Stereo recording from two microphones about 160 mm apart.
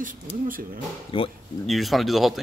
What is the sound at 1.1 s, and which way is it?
Speech, 35° left (ahead or behind).